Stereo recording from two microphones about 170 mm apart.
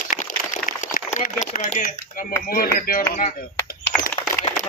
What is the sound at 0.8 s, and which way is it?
Speech, 45° left (ahead or behind).